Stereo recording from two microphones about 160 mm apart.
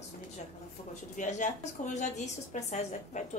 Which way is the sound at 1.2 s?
50° left (ahead or behind).